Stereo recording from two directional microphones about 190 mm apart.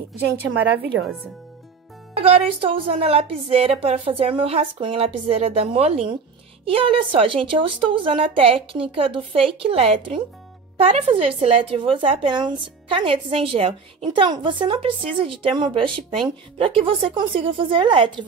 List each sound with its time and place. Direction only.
0.5 s a woman's voice: 90° right
2.1 s a woman's voice: 30° right (ahead or behind)